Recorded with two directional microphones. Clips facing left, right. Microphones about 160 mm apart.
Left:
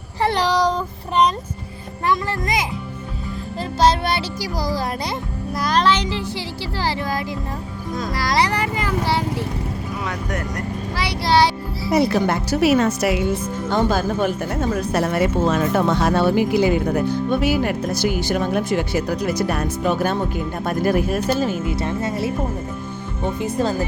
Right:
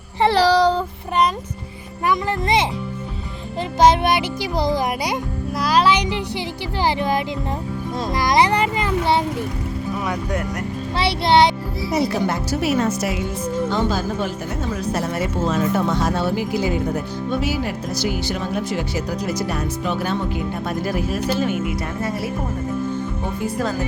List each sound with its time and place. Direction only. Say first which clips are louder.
0.2 s child singing: right 4 dB; 30° right (ahead or behind)
2.4 s a child's voice: right 4 dB; 30° right (ahead or behind)
3.6 s a child's voice: right 3 dB; 15° right (ahead or behind)
5.5 s a child's voice: right 1 dB; 5° right (ahead or behind); by 9.2 s 20° right (ahead or behind)
10.9 s a child's voice: right 2 dB; 25° right (ahead or behind)
11.9 s a woman's voice: left 3 dB; 65° left (ahead or behind)
13.7 s speech: left 6 dB; 55° left (ahead or behind)
21.4 s speech: left 1 dB; 25° left (ahead or behind)
23.4 s speech: left 2 dB; 25° left (ahead or behind)